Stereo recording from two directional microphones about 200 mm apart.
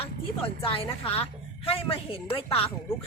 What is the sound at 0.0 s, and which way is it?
A woman's voice, 25° left (ahead or behind).